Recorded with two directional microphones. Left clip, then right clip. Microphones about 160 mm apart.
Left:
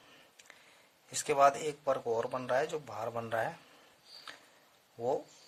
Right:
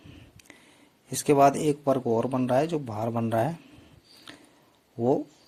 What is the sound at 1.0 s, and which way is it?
Speech, 25° right (ahead or behind).